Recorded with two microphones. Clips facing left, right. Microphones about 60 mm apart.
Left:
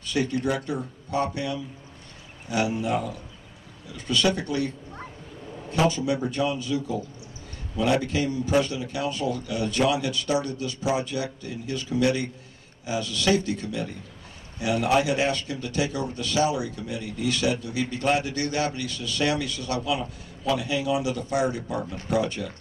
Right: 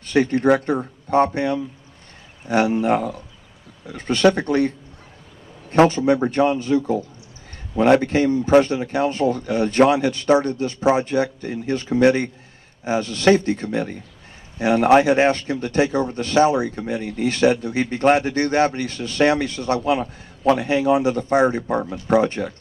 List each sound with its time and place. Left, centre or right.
0.0 s a man's voice: right